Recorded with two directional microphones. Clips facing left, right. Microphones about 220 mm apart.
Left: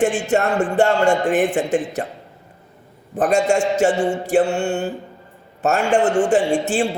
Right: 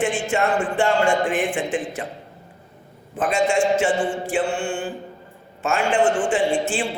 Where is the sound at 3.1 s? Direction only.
45° left (ahead or behind).